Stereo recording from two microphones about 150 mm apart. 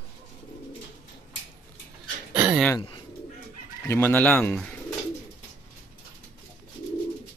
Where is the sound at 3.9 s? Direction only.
10° left (ahead or behind).